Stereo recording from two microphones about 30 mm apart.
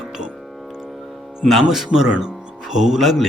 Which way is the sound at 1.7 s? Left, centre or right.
Centre.